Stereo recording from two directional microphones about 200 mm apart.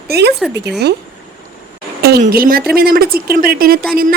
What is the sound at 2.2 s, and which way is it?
Speech, 45° right (ahead or behind).